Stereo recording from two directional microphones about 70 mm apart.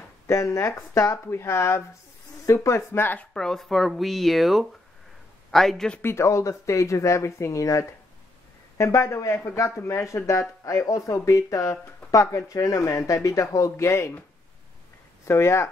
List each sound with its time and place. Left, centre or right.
0.3 s speech: left
3.3 s speech: centre
6.0 s speech: left
15.2 s speech: left